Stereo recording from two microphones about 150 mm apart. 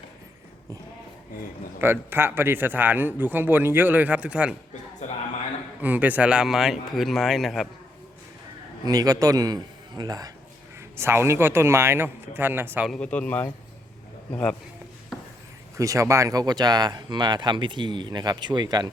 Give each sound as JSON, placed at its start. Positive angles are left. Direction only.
{"t": 1.8, "sound": "speech", "side_deg": -15}
{"t": 5.8, "sound": "speech", "side_deg": -10}
{"t": 8.9, "sound": "speech", "side_deg": -25}
{"t": 12.9, "sound": "speech", "side_deg": 10}
{"t": 15.8, "sound": "speech", "side_deg": -20}